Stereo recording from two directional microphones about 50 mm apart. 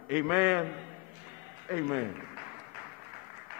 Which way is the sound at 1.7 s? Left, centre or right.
Right.